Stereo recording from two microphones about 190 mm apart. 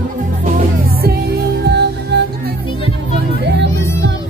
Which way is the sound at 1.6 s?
60° right (ahead or behind).